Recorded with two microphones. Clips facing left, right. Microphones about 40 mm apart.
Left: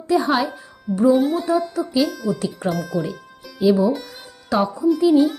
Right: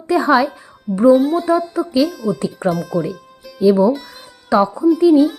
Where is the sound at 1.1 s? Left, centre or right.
Centre.